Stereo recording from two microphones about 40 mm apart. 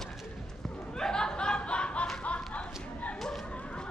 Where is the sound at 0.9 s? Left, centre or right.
Centre; by 3.1 s left.